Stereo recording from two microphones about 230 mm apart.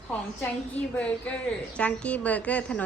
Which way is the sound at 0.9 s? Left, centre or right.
Centre.